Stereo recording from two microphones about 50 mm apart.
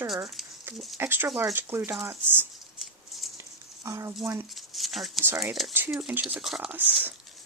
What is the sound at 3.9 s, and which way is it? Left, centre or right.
Speech, right.